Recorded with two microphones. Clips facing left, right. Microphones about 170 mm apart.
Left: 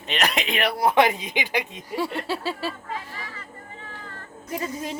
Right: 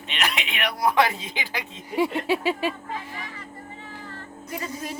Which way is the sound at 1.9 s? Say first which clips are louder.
Right 4 dB; 15° right (ahead or behind).